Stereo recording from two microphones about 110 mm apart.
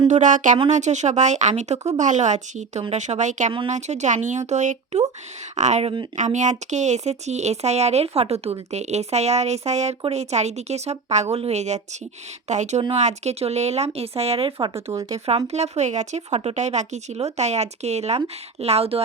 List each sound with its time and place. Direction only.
0.0 s speech: 90° right
10.0 s speech: 80° right; by 14.7 s 60° right (ahead or behind)
15.4 s speech: 85° right
18.6 s speech: 70° right (ahead or behind)